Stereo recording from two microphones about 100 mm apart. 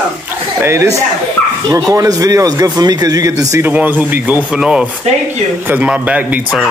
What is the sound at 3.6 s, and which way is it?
Speech, 15° right (ahead or behind).